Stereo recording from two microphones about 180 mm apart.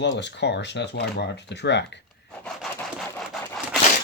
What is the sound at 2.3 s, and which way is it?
Wood, 5° left (ahead or behind).